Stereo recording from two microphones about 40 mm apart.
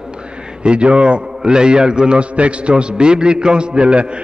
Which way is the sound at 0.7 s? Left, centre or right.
Right.